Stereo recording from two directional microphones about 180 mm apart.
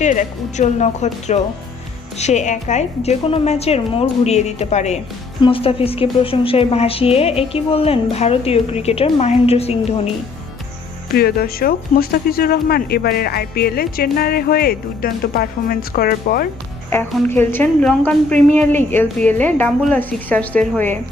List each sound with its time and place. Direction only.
0.0 s a woman's voice: 40° left (ahead or behind)
11.1 s speech: 60° left (ahead or behind)
16.9 s a woman's voice: 10° left (ahead or behind)